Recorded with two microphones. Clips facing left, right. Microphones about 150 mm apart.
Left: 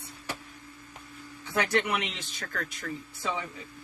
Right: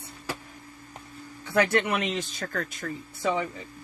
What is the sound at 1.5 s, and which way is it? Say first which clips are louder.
Speech: right 4 dB; 50° right (ahead or behind).